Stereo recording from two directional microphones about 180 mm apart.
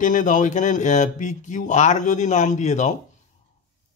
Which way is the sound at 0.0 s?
45° left (ahead or behind).